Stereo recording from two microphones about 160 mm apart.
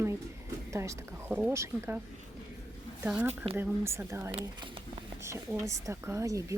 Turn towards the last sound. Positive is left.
turn(degrees=-20)  # may be behind; listen again after turning